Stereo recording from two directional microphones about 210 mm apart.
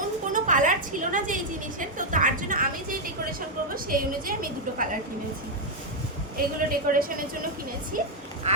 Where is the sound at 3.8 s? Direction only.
40° right (ahead or behind).